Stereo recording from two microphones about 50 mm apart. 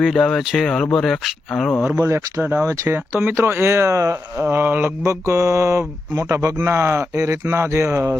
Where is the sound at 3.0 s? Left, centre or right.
Right.